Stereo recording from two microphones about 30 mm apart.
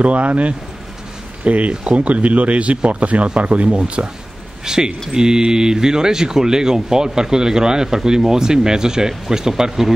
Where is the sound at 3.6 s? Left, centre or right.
Right.